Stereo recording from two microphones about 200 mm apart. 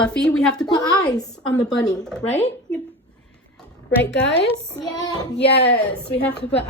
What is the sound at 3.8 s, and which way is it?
Speech, 60° left (ahead or behind).